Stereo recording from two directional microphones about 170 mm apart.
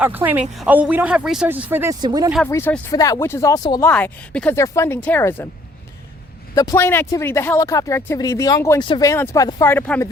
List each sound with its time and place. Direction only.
0.0 s speech: 10° right (ahead or behind)
2.0 s speech: 25° right (ahead or behind)
2.4 s speech: 10° left (ahead or behind)
3.9 s speech: 5° left (ahead or behind)
6.5 s speech: 20° left (ahead or behind)